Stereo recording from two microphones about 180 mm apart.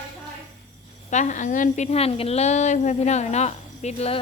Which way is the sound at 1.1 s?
45° left (ahead or behind).